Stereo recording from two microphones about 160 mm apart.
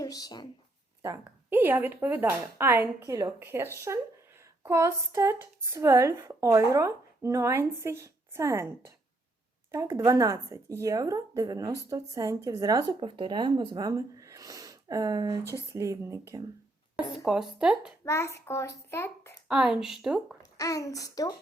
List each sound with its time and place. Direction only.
0.0 s speech: 25° left (ahead or behind)
1.0 s speech: 15° right (ahead or behind)
17.2 s speech: 5° right (ahead or behind)
18.0 s a child's voice: 15° left (ahead or behind)
19.5 s speech: 5° right (ahead or behind)
20.6 s a child's voice: 20° left (ahead or behind)